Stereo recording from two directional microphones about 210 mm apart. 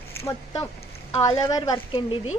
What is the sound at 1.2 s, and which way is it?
Speech, 15° left (ahead or behind).